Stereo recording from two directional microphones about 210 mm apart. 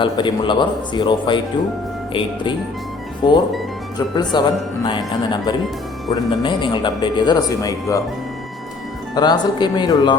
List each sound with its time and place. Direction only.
0.0 s speech: 20° left (ahead or behind)
3.2 s speech: 20° left (ahead or behind)
9.1 s speech: 20° left (ahead or behind)